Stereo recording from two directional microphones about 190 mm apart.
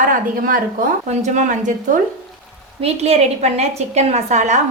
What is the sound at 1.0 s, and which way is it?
A woman's voice, 40° right (ahead or behind).